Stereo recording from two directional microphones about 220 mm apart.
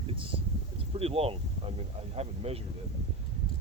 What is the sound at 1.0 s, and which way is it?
Speech, 25° right (ahead or behind).